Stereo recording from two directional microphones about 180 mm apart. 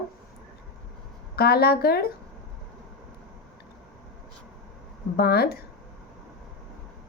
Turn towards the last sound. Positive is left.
turn(degrees=60)  # may be behind; listen again after turning